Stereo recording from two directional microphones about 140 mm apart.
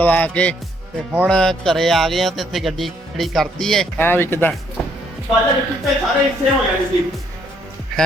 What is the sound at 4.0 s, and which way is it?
Speech, 15° left (ahead or behind).